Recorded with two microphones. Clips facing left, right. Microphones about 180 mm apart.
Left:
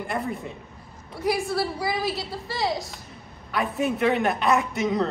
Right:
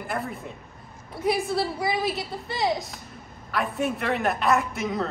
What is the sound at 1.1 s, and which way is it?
A woman's voice, 25° right (ahead or behind).